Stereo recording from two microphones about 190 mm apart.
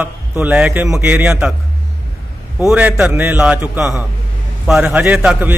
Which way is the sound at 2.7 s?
5° right (ahead or behind).